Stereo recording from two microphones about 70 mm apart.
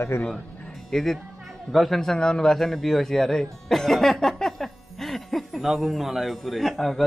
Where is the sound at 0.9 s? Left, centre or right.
Centre.